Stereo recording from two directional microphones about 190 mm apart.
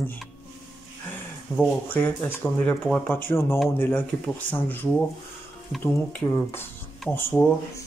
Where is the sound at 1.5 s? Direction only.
20° left (ahead or behind).